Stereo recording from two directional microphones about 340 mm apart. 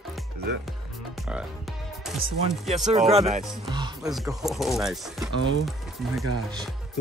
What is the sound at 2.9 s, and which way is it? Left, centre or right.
Speech, centre.